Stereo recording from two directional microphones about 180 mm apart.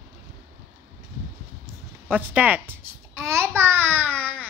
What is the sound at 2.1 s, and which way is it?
A child's voice, 10° right (ahead or behind).